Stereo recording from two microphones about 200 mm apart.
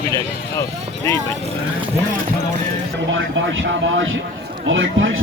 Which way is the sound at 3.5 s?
75° right (ahead or behind).